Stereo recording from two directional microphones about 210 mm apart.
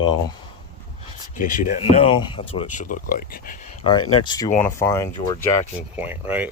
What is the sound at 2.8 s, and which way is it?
Speech, 40° left (ahead or behind).